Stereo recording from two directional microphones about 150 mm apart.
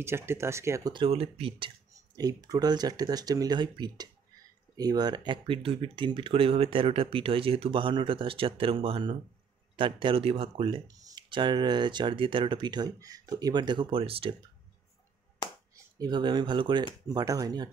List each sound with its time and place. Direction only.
0.0 s speech: 15° right (ahead or behind)
0.9 s speech: 40° right (ahead or behind)
2.1 s speech: 25° right (ahead or behind)
15.7 s speech: 30° right (ahead or behind)